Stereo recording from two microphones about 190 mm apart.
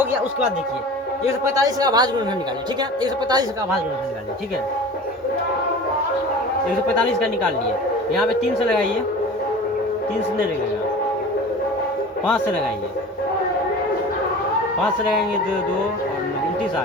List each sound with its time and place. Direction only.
1.5 s speech: 20° right (ahead or behind)
8.1 s a man's voice: centre (ahead or behind)